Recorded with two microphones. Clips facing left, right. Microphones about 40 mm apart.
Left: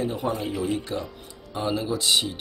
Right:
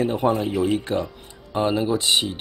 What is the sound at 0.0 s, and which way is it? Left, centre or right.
Speech, right.